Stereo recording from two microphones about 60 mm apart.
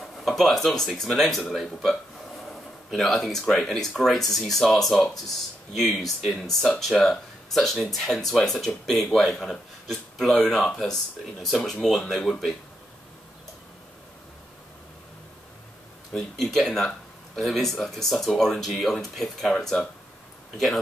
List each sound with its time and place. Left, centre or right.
0.0 s speech: centre
16.1 s speech: centre